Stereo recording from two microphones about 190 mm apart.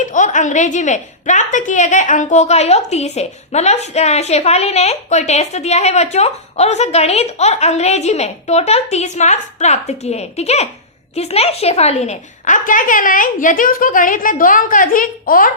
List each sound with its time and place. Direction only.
0.0 s a woman's voice: 40° left (ahead or behind)